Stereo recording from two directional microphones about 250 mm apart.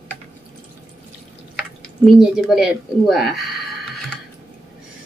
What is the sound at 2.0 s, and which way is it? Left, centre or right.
A woman's voice, centre.